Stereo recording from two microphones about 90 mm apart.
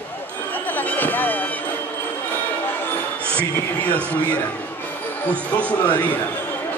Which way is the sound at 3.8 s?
15° left (ahead or behind).